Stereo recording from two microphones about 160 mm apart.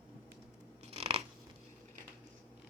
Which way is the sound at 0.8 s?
40° right (ahead or behind).